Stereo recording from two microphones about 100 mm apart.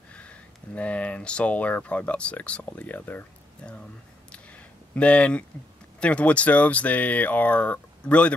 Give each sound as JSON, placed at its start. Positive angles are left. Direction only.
{"t": 0.1, "sound": "speech", "side_deg": 10}
{"t": 4.3, "sound": "a sound", "side_deg": 15}
{"t": 5.9, "sound": "speech", "side_deg": 10}